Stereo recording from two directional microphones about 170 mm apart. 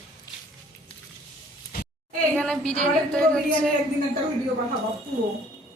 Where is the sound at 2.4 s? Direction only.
5° left (ahead or behind).